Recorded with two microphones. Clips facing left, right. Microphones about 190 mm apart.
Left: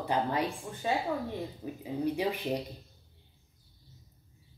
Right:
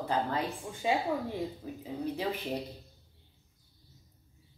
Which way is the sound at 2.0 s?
15° left (ahead or behind).